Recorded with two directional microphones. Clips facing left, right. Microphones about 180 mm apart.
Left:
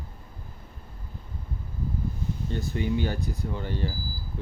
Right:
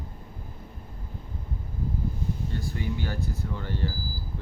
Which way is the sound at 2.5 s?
20° left (ahead or behind).